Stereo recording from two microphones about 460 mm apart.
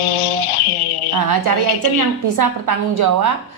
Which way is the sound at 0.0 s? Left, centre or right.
Left.